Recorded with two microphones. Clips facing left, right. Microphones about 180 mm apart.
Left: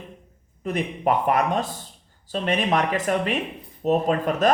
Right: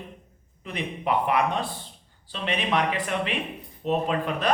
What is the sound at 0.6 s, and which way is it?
Speech, 45° left (ahead or behind).